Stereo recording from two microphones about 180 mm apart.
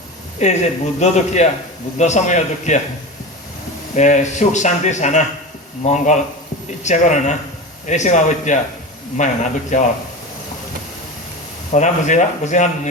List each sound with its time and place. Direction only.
0.4 s speech: 40° left (ahead or behind)
3.9 s a man's voice: 40° left (ahead or behind)
11.7 s speech: 40° left (ahead or behind)